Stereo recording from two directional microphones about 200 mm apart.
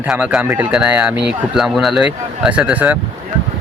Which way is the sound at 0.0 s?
10° right (ahead or behind).